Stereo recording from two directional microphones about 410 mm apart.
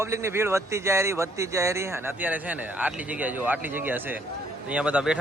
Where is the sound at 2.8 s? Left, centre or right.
Centre.